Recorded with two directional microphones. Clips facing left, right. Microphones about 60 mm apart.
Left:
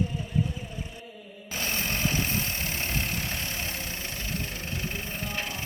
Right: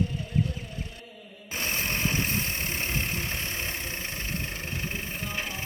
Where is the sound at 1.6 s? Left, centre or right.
Centre.